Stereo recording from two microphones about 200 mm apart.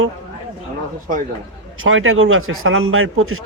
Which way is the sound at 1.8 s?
90° right.